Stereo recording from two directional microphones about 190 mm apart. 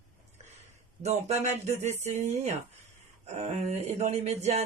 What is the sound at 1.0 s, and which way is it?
Speech, 35° right (ahead or behind).